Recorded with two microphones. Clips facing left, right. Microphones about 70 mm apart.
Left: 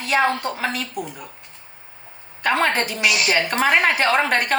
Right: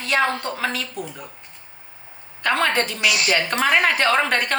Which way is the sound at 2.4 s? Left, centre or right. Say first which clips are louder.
Left 1 dB; centre.